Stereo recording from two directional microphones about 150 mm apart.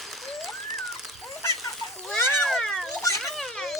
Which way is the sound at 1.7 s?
Centre (ahead or behind).